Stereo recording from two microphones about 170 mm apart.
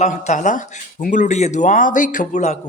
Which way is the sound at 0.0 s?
45° left (ahead or behind).